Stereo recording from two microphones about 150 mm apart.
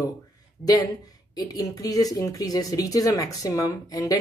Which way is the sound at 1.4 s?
25° left (ahead or behind).